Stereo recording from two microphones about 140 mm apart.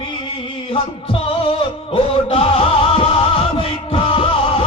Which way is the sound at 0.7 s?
45° left (ahead or behind).